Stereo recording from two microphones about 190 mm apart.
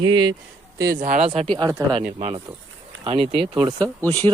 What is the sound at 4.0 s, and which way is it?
Speech, 10° left (ahead or behind).